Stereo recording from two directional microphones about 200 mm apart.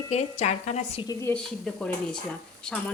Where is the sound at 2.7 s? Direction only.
5° left (ahead or behind).